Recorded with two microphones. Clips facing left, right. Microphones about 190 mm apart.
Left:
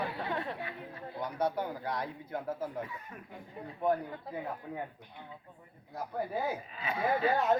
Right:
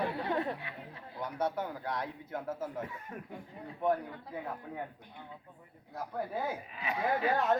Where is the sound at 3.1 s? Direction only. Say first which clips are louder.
Right 4 dB; 40° right (ahead or behind).